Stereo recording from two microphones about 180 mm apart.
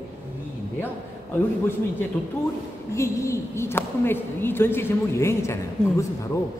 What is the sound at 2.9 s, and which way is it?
Speech, 15° left (ahead or behind).